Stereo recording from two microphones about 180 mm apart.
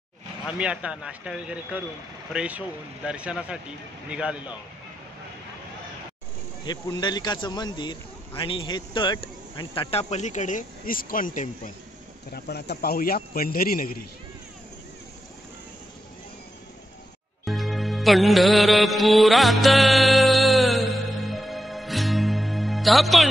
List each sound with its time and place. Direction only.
0.6 s a man's voice: 5° right (ahead or behind)
6.6 s speech: 25° left (ahead or behind); by 11.7 s 45° left (ahead or behind)
12.3 s a man's voice: 60° left (ahead or behind)
17.5 s music: centre (ahead or behind)